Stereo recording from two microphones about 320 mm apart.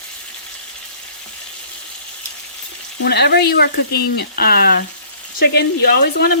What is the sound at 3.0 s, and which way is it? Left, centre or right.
Speech, left.